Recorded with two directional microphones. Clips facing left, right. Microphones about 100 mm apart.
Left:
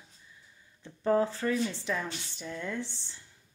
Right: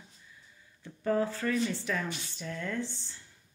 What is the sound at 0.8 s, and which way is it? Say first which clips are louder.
Speech: left 3 dB; 25° left (ahead or behind).